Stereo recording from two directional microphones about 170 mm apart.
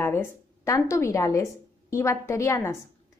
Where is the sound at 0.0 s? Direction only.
15° left (ahead or behind).